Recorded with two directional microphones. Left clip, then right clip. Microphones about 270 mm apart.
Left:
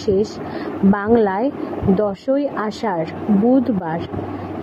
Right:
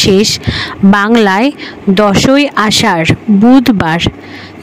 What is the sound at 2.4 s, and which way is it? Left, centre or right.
Speech, right.